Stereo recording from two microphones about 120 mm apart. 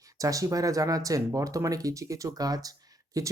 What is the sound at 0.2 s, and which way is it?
Speech, 30° right (ahead or behind).